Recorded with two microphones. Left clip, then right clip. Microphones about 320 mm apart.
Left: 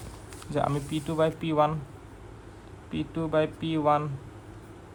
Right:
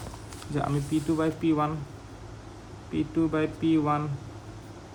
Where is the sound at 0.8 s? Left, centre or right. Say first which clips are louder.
Right 4 dB; centre.